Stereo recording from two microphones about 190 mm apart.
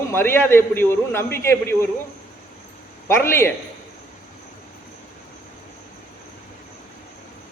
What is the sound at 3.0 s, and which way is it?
Speech, 15° left (ahead or behind).